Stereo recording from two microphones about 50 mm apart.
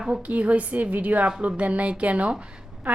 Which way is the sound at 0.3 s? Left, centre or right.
Right.